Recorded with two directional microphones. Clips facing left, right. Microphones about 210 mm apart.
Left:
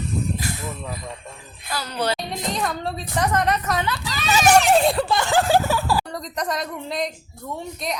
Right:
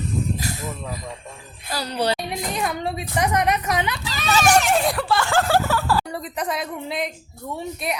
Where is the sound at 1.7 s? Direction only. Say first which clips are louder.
Right 2 dB; 35° right (ahead or behind).